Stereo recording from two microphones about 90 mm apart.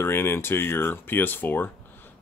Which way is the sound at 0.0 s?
25° left (ahead or behind).